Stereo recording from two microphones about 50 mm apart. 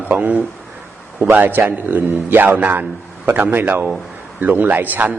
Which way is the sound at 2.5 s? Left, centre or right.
Right.